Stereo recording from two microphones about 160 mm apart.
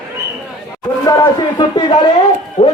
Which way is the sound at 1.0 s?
25° left (ahead or behind).